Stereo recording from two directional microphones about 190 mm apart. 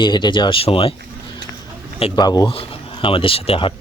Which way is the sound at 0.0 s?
25° left (ahead or behind).